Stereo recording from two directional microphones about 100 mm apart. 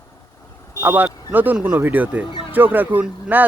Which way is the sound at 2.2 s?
50° left (ahead or behind).